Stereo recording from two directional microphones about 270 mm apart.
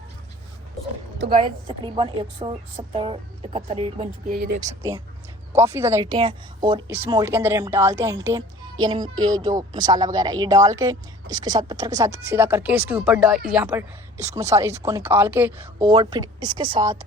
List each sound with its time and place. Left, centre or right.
1.2 s a woman's voice: right
1.6 s a woman's voice: centre; by 4.8 s right
4.8 s speech: centre